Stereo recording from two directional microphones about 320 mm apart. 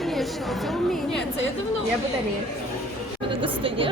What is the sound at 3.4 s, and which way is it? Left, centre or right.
Speech, centre.